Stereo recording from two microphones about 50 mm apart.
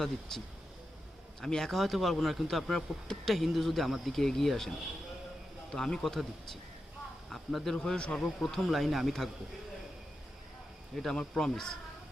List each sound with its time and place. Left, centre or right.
0.3 s speech: centre
5.7 s speech: centre
7.8 s speech: centre
8.4 s speech: centre
10.9 s speech: centre